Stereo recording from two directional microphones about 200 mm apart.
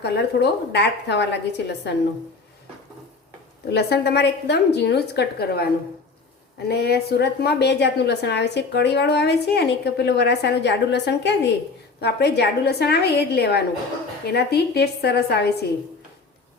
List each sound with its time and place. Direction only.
0.0 s a woman's voice: 55° left (ahead or behind)
3.7 s a woman's voice: 55° left (ahead or behind)
6.7 s a woman's voice: 55° left (ahead or behind)